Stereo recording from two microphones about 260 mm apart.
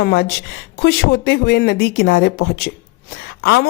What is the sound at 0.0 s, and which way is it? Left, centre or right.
Speech, left.